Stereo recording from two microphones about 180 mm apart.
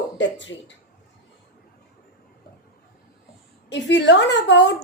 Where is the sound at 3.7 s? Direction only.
80° left.